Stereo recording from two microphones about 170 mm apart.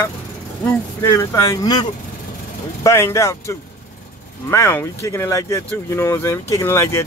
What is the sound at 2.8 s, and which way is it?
Speech, 15° left (ahead or behind).